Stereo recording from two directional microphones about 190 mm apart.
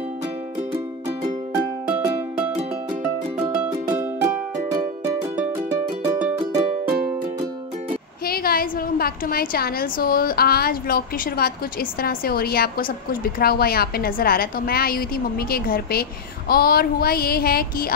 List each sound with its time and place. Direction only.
0.7 s music: 15° right (ahead or behind)
8.3 s a woman's voice: 50° left (ahead or behind)